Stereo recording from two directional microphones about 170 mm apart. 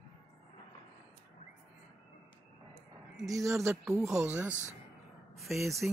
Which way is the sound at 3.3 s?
20° right (ahead or behind).